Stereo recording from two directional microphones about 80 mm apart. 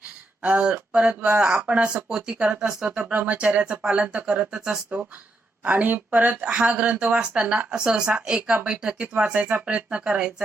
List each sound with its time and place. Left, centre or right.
0.4 s speech: centre
5.6 s speech: right